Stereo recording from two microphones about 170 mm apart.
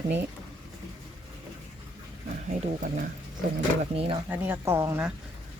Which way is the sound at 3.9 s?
35° right (ahead or behind).